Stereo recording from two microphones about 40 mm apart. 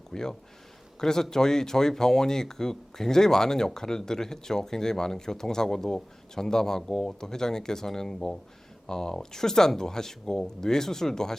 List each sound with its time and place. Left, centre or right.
0.1 s speech: centre